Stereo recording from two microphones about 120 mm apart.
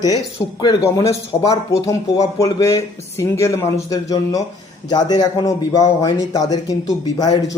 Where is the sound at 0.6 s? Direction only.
35° left (ahead or behind).